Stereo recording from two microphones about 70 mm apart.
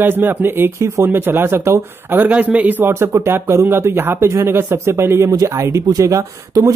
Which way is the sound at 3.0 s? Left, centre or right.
Right.